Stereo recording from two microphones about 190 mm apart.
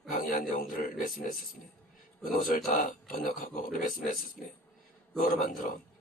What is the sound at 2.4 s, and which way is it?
A man's voice, 45° left (ahead or behind).